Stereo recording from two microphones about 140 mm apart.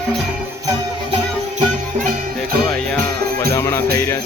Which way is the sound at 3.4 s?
20° left (ahead or behind).